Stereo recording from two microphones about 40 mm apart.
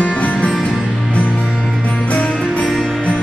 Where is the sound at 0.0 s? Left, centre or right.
Left.